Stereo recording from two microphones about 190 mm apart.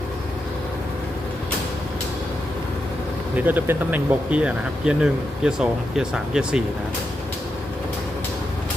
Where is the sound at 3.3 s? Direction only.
10° right (ahead or behind).